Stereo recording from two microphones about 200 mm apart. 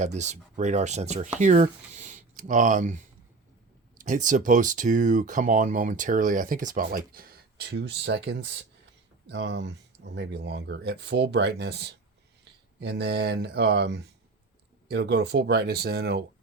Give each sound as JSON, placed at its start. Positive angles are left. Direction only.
{"t": 0.0, "sound": "speech", "side_deg": -35}